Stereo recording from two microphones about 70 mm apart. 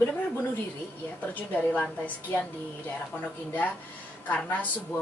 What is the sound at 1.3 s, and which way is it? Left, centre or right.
A woman's voice, left.